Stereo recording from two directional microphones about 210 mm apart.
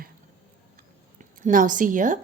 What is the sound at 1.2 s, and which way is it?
A woman's voice, 40° right (ahead or behind).